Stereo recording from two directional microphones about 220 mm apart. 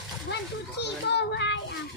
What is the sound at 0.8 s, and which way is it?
Child singing, 50° left (ahead or behind).